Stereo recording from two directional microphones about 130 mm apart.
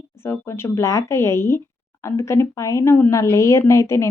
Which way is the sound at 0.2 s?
20° left (ahead or behind).